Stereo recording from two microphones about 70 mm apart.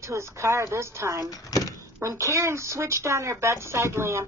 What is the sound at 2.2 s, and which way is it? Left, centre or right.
Speech, right.